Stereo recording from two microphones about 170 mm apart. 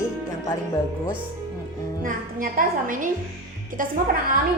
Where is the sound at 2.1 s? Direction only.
55° right (ahead or behind).